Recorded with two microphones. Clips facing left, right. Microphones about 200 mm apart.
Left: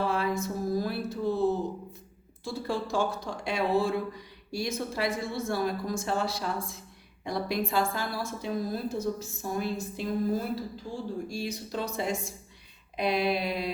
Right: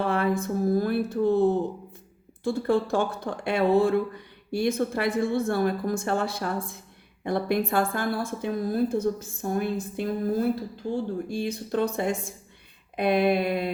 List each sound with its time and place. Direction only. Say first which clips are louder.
0.1 s a woman's voice: right 4 dB; 55° right (ahead or behind)